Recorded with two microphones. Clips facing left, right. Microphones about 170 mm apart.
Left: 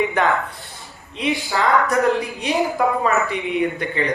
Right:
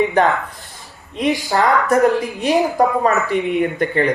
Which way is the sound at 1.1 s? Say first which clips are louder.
Right 4 dB; 45° right (ahead or behind).